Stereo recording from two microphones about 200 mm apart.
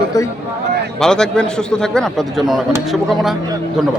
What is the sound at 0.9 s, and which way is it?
Speech, 5° left (ahead or behind).